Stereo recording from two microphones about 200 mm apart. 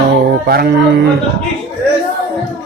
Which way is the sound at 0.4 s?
50° right (ahead or behind).